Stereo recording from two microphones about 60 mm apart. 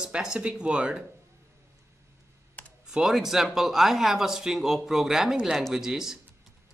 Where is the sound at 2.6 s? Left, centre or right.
Left.